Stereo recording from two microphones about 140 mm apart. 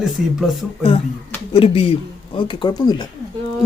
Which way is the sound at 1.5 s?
40° left (ahead or behind).